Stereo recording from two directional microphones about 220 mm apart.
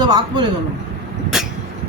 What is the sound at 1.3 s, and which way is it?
Vehicle, 5° right (ahead or behind).